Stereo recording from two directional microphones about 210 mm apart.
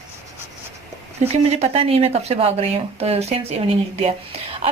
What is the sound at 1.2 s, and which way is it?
A woman's voice, 35° right (ahead or behind).